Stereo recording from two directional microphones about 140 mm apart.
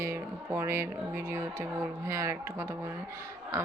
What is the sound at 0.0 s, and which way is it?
Speech, 20° right (ahead or behind).